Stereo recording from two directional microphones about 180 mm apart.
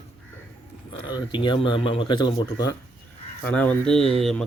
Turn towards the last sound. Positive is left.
turn(degrees=5)  # may be behind; listen again after turning